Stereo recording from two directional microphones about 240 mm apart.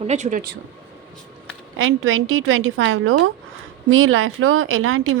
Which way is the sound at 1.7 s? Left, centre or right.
Right.